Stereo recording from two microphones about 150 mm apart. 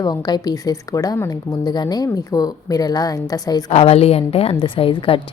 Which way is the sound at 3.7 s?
40° left (ahead or behind).